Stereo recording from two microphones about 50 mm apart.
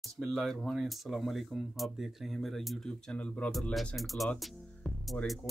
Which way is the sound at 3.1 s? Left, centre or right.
Left.